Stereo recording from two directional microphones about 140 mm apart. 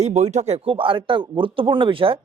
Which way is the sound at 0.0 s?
55° right (ahead or behind).